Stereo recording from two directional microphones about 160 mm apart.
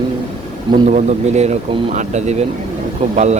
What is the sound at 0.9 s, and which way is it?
Speech, 50° right (ahead or behind).